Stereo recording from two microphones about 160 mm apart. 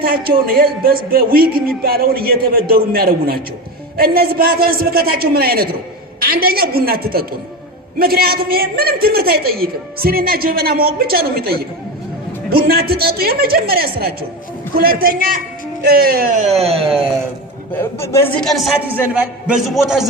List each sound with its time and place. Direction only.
0.0 s a man's voice: 70° right (ahead or behind)
16.4 s speech: 40° right (ahead or behind)
18.0 s a woman's voice: 15° left (ahead or behind)
18.3 s a man's voice: centre (ahead or behind)